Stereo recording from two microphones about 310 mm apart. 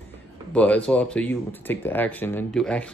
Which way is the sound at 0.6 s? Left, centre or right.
Centre.